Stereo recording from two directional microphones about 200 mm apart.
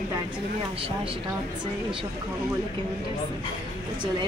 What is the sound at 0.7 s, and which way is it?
Speech, 25° right (ahead or behind).